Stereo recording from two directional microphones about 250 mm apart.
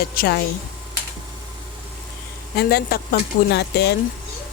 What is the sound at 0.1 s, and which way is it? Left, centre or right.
Speech, left.